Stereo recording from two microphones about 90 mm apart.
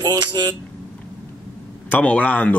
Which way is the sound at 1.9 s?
10° left (ahead or behind).